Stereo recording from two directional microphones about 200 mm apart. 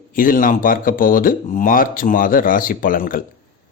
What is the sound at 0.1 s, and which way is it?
Speech, 45° left (ahead or behind).